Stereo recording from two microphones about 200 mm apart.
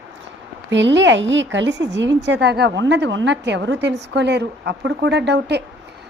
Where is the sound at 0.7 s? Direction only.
65° right (ahead or behind).